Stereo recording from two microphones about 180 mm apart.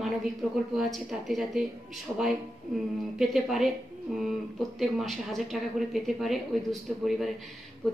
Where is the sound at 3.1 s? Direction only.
Centre (ahead or behind).